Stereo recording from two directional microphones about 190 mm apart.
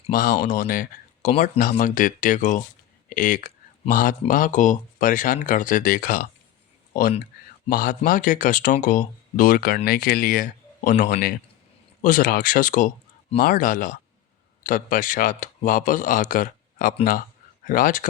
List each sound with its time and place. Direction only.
0.1 s speech: 45° left (ahead or behind)
7.7 s speech: 50° left (ahead or behind)